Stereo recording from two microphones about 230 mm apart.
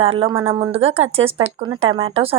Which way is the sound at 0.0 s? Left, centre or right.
Right.